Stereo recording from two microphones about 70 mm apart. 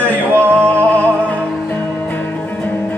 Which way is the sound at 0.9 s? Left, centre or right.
Left.